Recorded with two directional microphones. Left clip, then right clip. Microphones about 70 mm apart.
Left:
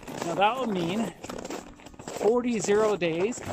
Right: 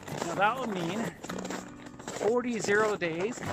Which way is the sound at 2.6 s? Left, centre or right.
Left.